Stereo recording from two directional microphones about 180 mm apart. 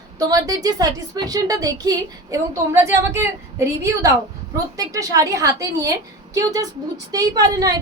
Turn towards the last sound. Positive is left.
turn(degrees=-20)  # may be behind; listen again after turning